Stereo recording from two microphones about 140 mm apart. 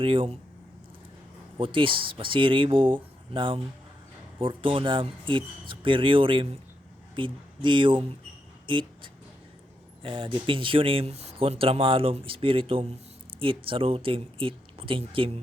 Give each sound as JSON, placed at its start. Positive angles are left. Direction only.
{"t": 0.0, "sound": "speech", "side_deg": -40}
{"t": 1.5, "sound": "speech", "side_deg": -40}
{"t": 10.0, "sound": "speech", "side_deg": -40}